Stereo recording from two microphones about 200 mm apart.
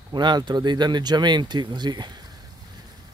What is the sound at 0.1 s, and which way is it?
Speech, 20° right (ahead or behind).